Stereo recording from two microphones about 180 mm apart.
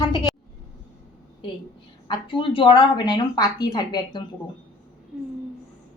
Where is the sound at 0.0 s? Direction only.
20° left (ahead or behind).